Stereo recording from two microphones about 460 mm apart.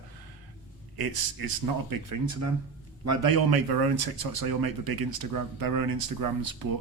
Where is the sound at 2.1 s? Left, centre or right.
Right.